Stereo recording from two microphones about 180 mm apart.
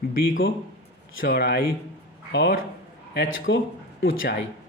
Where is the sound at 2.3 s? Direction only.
80° left.